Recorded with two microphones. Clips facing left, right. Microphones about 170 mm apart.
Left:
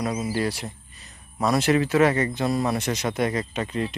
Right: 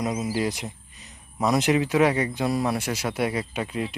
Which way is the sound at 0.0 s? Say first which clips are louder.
Even; 20° right (ahead or behind).